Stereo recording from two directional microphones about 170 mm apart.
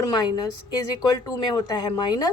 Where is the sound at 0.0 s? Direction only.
25° left (ahead or behind).